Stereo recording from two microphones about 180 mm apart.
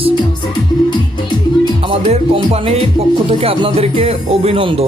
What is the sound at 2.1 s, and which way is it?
Speech, 35° right (ahead or behind).